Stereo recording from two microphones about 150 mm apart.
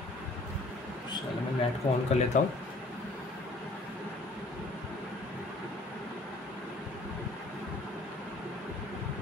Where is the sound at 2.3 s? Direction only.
55° left (ahead or behind).